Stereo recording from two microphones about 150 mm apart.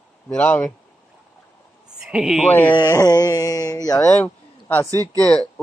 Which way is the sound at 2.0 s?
5° right (ahead or behind).